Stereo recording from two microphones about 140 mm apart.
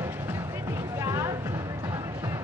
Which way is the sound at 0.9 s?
20° right (ahead or behind).